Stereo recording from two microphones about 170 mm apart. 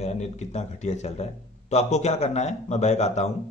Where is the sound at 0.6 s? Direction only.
40° left (ahead or behind).